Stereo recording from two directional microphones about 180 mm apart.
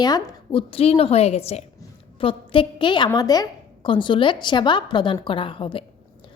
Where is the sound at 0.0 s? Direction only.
25° left (ahead or behind).